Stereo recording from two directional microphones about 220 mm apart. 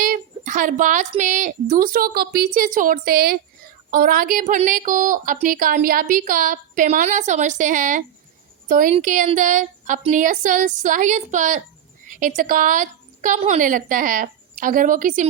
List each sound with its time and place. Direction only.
0.0 s a woman's voice: 35° right (ahead or behind)